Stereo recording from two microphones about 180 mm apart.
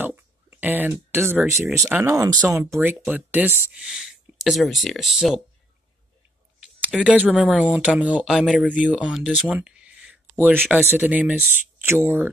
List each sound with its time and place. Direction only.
0.0 s a sound: 10° right (ahead or behind)
1.8 s speech: 10° right (ahead or behind)
6.6 s speech: 5° right (ahead or behind)